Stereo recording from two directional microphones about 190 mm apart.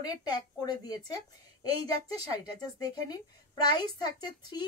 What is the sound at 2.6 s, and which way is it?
A woman's voice, 20° left (ahead or behind).